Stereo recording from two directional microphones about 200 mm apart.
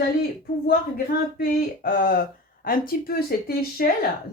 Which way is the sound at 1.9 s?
45° left (ahead or behind).